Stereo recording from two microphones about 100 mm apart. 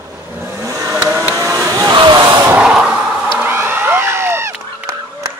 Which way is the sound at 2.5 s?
10° right (ahead or behind).